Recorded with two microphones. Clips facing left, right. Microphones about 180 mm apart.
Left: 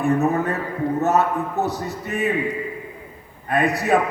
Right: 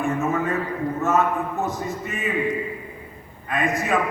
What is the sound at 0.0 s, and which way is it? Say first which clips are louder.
Speech: left 4 dB; 35° left (ahead or behind).